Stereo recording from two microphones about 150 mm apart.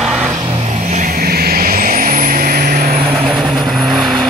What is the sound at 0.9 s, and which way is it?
Vehicle, 60° right (ahead or behind).